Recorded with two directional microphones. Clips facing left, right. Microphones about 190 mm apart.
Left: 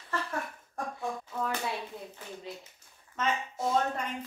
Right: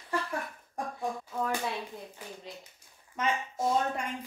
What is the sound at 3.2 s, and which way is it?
Speech, 10° right (ahead or behind).